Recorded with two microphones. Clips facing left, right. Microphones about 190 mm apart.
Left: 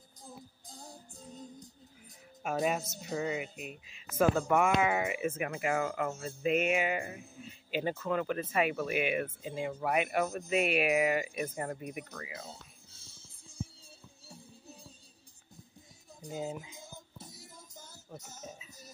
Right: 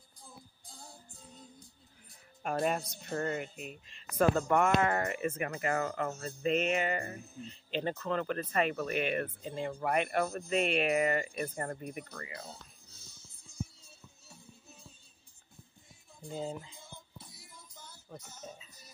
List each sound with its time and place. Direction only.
1.1 s music: 40° left (ahead or behind)
2.4 s speech: 5° left (ahead or behind)
12.4 s music: 30° left (ahead or behind)
16.3 s speech: 5° left (ahead or behind)
16.7 s music: 45° left (ahead or behind)
18.2 s speech: 45° left (ahead or behind)